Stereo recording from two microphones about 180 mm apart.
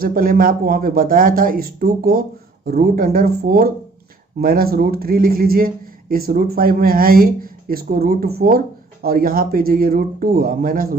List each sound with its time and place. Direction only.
0.0 s speech: 55° right (ahead or behind)